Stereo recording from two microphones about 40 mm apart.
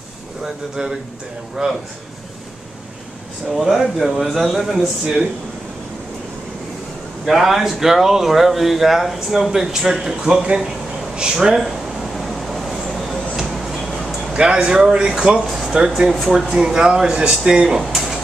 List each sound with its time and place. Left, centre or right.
0.4 s speech: centre
3.5 s a man's voice: centre
7.2 s speech: centre
11.6 s a sound: centre
13.5 s music: centre
14.3 s speech: right
16.1 s a man's voice: centre
16.4 s speech: centre